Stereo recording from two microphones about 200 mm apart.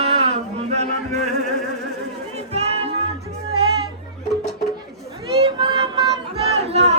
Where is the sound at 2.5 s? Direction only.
30° right (ahead or behind).